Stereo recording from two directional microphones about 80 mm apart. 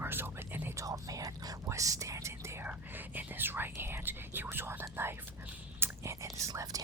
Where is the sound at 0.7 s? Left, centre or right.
Right.